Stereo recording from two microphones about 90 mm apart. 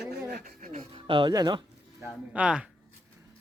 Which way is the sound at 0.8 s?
80° right.